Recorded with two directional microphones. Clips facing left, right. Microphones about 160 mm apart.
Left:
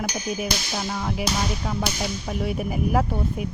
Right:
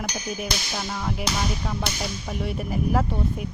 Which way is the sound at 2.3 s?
5° left (ahead or behind).